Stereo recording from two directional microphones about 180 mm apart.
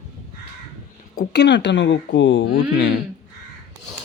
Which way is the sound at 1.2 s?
65° left (ahead or behind).